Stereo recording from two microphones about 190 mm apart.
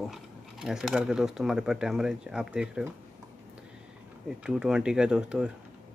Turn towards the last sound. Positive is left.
turn(degrees=-5)  # may be behind; listen again after turning